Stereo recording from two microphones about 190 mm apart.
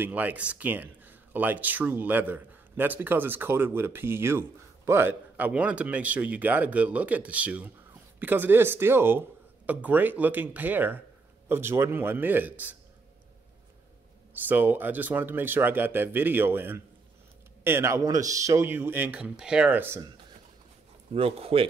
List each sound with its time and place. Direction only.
0.0 s speech: 10° right (ahead or behind)
14.3 s speech: 10° right (ahead or behind)
21.1 s speech: 30° right (ahead or behind)